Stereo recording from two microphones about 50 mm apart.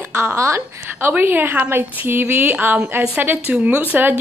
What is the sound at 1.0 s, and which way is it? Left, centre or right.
A woman's voice, right.